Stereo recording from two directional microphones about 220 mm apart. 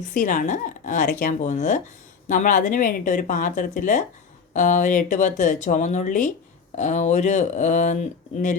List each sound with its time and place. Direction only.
0.0 s speech: 35° left (ahead or behind)